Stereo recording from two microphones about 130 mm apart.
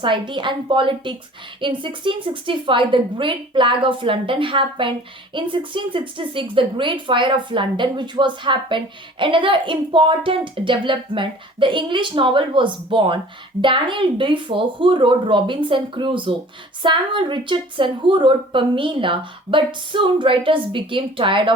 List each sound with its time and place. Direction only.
0.0 s a woman's voice: 40° right (ahead or behind)